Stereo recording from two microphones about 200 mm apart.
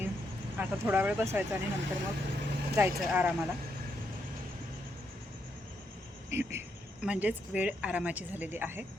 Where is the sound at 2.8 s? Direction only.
10° right (ahead or behind).